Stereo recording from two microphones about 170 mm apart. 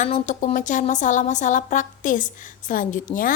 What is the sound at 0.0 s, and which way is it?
Speech, 45° left (ahead or behind).